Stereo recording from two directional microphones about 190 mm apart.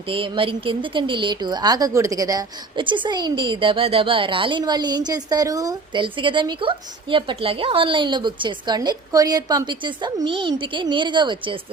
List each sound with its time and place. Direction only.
0.1 s speech: 30° right (ahead or behind)